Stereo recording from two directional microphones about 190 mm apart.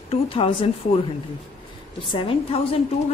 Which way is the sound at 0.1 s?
30° left (ahead or behind).